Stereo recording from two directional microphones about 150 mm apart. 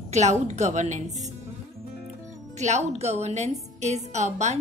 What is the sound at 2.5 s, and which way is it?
A woman's voice, 50° right (ahead or behind).